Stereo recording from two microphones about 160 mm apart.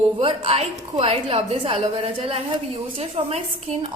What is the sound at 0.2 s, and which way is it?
A woman's voice, 35° right (ahead or behind).